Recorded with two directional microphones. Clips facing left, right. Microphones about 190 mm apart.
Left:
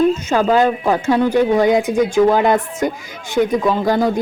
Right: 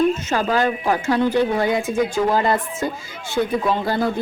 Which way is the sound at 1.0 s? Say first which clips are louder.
Left 4 dB; 20° left (ahead or behind).